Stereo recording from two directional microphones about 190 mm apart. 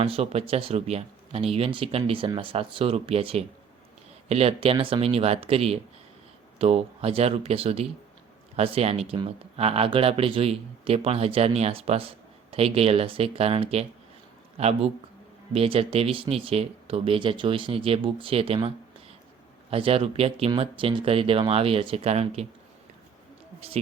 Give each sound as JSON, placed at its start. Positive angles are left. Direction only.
{"t": 0.0, "sound": "speech", "side_deg": -30}
{"t": 19.7, "sound": "speech", "side_deg": -30}
{"t": 23.6, "sound": "speech", "side_deg": -30}